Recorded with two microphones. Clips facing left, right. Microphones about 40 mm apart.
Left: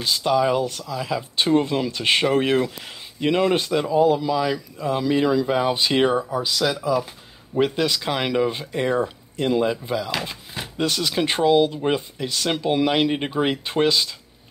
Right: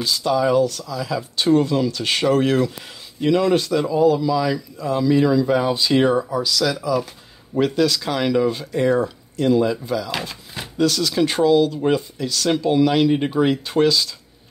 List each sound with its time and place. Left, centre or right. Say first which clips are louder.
0.0 s speech: right 1 dB; left